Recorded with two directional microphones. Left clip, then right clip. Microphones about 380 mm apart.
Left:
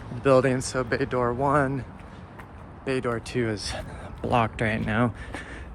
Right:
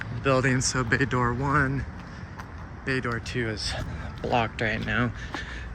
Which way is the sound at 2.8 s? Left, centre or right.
Centre.